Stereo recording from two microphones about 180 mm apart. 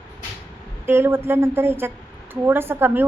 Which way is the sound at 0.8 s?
10° right (ahead or behind).